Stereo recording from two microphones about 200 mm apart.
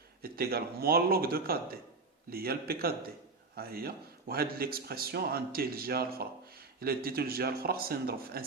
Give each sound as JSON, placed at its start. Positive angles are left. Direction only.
{"t": 0.2, "sound": "a man's voice", "side_deg": -50}